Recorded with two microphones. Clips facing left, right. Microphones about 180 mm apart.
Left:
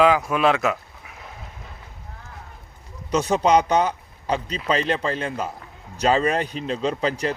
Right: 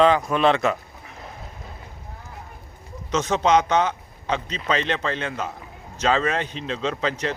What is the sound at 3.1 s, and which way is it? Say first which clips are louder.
Speech: left 1 dB; 10° left (ahead or behind).